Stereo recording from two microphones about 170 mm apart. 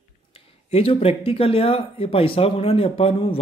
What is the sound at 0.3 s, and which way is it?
Speech, 35° left (ahead or behind).